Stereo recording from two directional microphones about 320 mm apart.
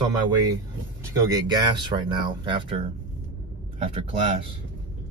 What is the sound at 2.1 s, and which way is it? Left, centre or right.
Speech, centre.